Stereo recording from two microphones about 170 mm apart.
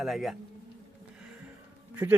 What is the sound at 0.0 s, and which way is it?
Speech, centre (ahead or behind).